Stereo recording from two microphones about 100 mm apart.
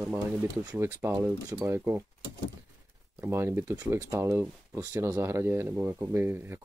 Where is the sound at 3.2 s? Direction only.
25° right (ahead or behind).